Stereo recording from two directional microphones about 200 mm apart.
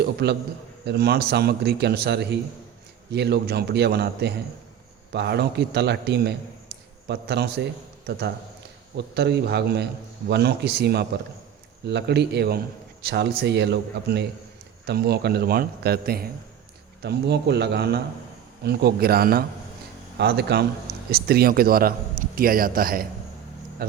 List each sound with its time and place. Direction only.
0.0 s a man's voice: 55° right (ahead or behind)